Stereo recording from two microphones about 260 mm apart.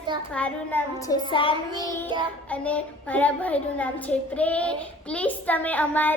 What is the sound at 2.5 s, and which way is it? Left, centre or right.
A child's voice, centre.